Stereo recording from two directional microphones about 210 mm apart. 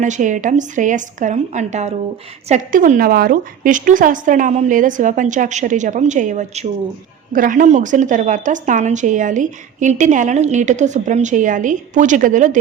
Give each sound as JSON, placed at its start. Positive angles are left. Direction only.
{"t": 0.0, "sound": "a woman's voice", "side_deg": -35}